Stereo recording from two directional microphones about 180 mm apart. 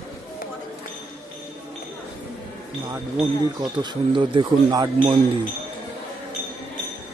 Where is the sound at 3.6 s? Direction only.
25° right (ahead or behind).